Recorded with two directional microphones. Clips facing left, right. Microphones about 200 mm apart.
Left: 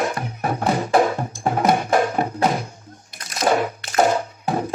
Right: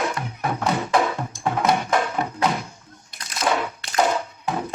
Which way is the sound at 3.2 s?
35° left (ahead or behind).